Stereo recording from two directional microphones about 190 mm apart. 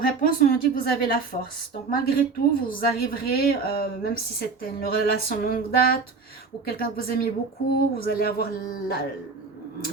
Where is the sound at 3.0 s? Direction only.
55° left (ahead or behind).